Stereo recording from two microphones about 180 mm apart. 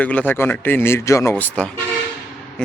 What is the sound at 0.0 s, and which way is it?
A man's voice, 5° left (ahead or behind).